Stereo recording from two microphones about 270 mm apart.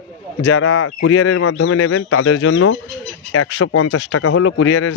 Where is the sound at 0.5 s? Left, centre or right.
Left.